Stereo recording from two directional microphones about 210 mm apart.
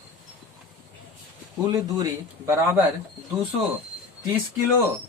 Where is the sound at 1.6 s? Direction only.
15° right (ahead or behind).